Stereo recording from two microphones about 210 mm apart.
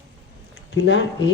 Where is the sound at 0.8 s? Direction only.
55° left (ahead or behind).